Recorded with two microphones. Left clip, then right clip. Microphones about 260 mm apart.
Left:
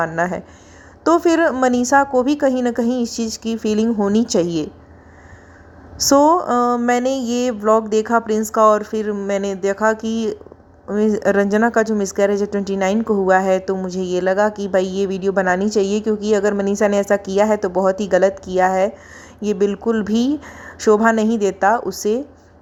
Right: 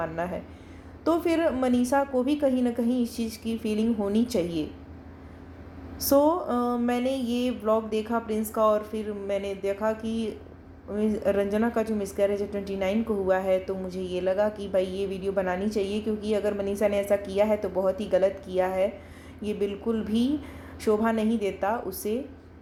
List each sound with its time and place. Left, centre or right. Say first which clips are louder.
0.0 s a woman's voice: left 11 dB; left
6.0 s a woman's voice: left 9 dB; left